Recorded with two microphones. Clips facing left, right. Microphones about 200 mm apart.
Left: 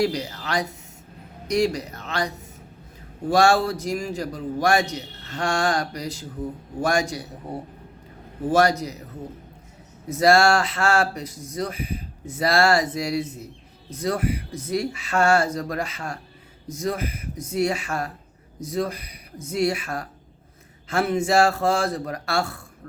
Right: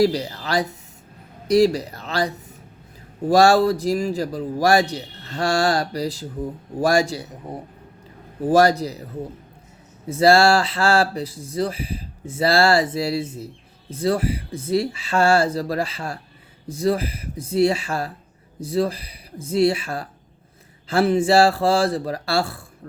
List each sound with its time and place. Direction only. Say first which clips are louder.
0.0 s a man's voice: right 5 dB; 35° right (ahead or behind)
8.4 s a man's voice: right 4 dB; 35° right (ahead or behind)
10.1 s a man's voice: right 2 dB; 30° right (ahead or behind)